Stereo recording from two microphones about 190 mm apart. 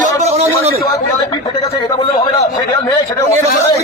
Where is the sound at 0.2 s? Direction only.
35° right (ahead or behind).